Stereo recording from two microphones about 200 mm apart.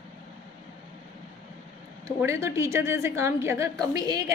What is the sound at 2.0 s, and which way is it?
A woman's voice, 15° right (ahead or behind).